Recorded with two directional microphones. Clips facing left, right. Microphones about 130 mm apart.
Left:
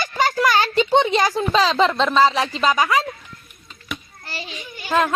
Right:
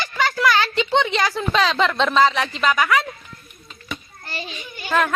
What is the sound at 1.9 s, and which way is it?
Speech, centre (ahead or behind).